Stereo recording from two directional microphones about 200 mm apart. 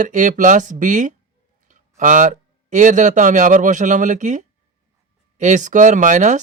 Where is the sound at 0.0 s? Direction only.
40° right (ahead or behind).